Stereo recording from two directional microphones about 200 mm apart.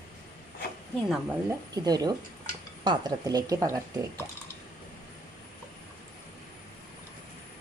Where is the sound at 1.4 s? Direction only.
20° right (ahead or behind).